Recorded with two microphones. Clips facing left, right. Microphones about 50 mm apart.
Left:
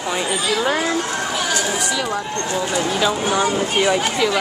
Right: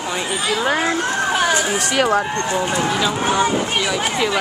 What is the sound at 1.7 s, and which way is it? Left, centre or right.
Speech, right.